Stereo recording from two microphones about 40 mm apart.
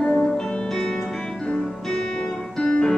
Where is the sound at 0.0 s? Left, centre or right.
Left.